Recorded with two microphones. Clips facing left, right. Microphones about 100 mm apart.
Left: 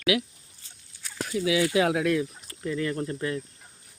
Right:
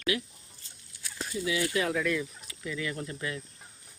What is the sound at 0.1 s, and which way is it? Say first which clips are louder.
Speech: left 7 dB; 85° left.